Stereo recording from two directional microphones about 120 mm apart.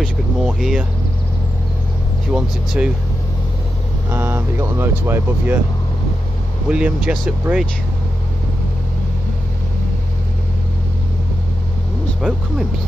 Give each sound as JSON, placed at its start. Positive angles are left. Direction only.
{"t": 0.0, "sound": "a sound", "side_deg": -5}
{"t": 2.3, "sound": "speech", "side_deg": -5}
{"t": 4.1, "sound": "speech", "side_deg": -20}
{"t": 6.7, "sound": "speech", "side_deg": -10}
{"t": 12.2, "sound": "speech", "side_deg": -5}